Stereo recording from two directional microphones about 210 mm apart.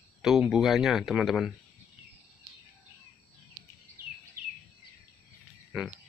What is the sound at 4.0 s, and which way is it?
Bird vocalization, 45° right (ahead or behind).